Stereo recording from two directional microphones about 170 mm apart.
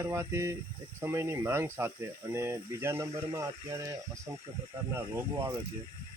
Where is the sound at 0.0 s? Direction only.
15° right (ahead or behind).